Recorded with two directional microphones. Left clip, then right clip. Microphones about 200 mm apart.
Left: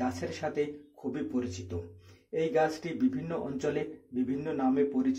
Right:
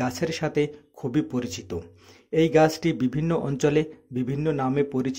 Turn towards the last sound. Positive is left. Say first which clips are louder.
# right 3 dB
turn(degrees=-40)  # may be behind; listen again after turning